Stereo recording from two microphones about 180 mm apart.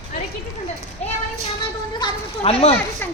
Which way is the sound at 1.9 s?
30° left (ahead or behind).